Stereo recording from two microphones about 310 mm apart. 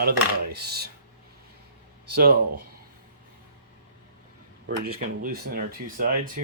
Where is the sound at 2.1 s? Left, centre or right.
Right.